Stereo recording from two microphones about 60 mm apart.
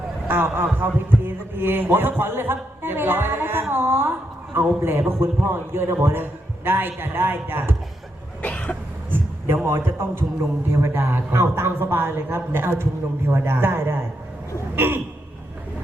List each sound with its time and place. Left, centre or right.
0.3 s a woman's voice: right
8.4 s cough: left
9.0 s a sound: right
9.6 s a man's voice: right
10.9 s a woman's voice: right